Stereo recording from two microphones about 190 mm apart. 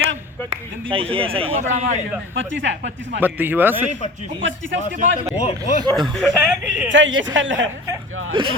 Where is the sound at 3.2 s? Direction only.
10° right (ahead or behind).